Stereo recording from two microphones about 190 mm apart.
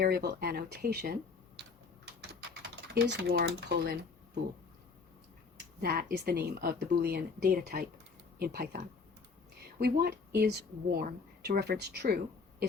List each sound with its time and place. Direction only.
0.0 s speech: 55° right (ahead or behind)
2.9 s speech: 55° right (ahead or behind)
5.8 s speech: 55° right (ahead or behind)